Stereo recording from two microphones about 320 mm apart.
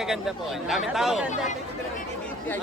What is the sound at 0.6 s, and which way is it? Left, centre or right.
Speech, centre.